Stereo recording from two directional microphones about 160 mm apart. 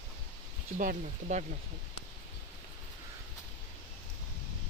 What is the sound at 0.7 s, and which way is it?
Speech, 60° right (ahead or behind).